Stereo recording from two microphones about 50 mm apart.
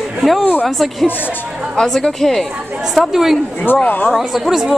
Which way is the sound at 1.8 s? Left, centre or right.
Centre.